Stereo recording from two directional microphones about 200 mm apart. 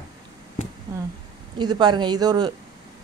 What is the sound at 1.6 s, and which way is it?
Speech, 20° right (ahead or behind).